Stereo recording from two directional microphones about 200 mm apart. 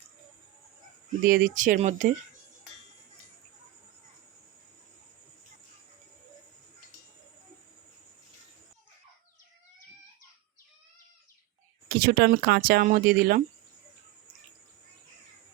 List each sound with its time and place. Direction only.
1.3 s speech: 40° right (ahead or behind)
11.9 s speech: 50° right (ahead or behind)